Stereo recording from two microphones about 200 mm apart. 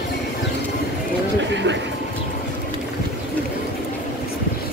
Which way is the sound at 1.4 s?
65° right (ahead or behind).